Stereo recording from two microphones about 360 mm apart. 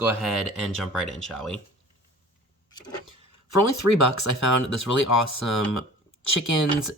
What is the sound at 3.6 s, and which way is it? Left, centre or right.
Speech, left.